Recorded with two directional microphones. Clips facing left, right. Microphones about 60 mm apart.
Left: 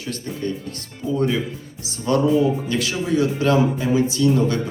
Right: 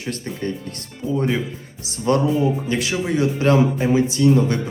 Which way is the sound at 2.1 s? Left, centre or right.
Right.